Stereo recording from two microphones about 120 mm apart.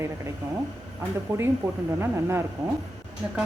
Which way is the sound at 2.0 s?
20° right (ahead or behind).